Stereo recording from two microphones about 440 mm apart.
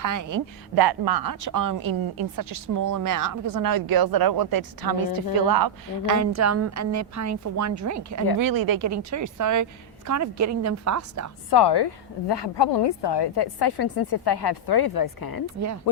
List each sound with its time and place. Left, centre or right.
0.0 s a woman's voice: right
11.5 s a woman's voice: left